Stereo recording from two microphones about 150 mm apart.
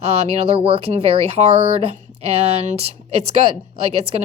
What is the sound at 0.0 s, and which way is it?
Speech, 45° right (ahead or behind).